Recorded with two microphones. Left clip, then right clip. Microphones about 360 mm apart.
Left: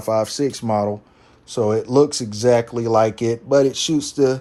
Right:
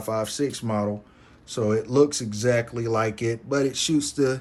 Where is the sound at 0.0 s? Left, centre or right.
Centre.